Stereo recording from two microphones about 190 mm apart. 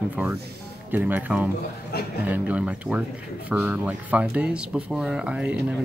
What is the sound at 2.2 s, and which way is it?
Speech, 10° right (ahead or behind).